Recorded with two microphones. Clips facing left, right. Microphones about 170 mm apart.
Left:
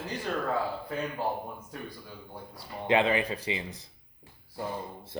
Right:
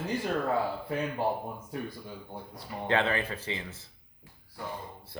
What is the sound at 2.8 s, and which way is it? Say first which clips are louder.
Speech: left 3 dB; 15° left (ahead or behind).